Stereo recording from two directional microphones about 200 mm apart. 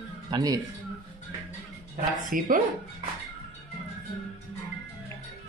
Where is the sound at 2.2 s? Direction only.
45° right (ahead or behind).